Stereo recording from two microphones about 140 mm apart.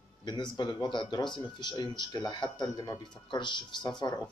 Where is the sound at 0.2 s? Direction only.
30° left (ahead or behind).